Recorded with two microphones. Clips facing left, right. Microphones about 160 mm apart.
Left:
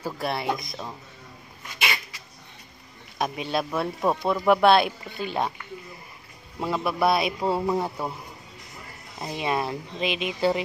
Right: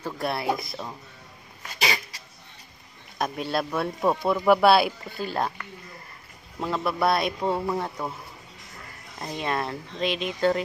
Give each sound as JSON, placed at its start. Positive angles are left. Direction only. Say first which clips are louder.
{"t": 0.0, "sound": "speech", "louder": "even", "side_deg": 0}
{"t": 1.8, "sound": "cat", "louder": "right 2 dB", "side_deg": -35}
{"t": 3.2, "sound": "speech", "louder": "even", "side_deg": 0}
{"t": 6.6, "sound": "a man's voice", "louder": "left 1 dB", "side_deg": 5}
{"t": 9.2, "sound": "a man's voice", "louder": "left 2 dB", "side_deg": 10}